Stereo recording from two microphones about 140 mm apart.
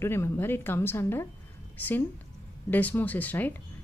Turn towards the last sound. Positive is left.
turn(degrees=10)  # may be behind; listen again after turning